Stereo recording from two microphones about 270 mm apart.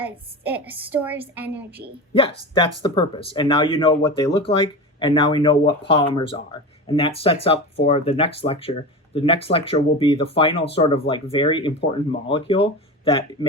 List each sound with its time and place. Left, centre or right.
0.0 s a woman's voice: centre
2.1 s speech: centre